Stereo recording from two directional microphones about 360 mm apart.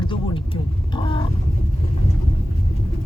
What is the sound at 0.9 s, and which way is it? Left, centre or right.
Vehicle, centre.